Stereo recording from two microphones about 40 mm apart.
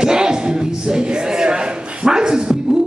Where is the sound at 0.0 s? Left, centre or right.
Centre.